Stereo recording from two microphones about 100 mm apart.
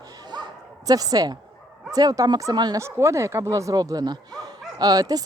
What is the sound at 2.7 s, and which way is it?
Speech, 30° right (ahead or behind).